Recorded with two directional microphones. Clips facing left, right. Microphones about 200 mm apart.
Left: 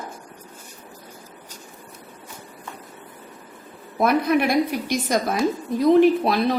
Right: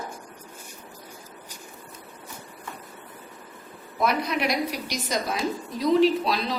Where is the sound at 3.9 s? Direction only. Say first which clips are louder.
Left 6 dB; 55° left (ahead or behind).